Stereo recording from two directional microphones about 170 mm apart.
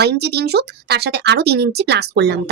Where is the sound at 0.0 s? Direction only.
75° right (ahead or behind).